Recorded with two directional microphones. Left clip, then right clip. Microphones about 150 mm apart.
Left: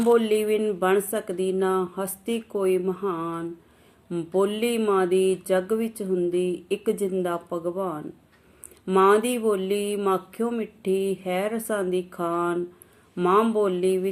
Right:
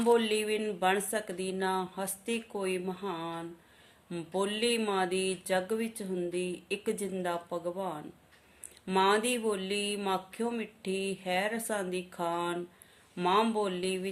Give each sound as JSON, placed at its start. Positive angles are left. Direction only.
{"t": 0.2, "sound": "speech", "side_deg": -20}